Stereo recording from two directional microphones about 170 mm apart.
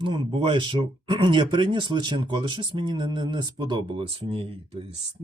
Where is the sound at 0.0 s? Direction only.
30° right (ahead or behind).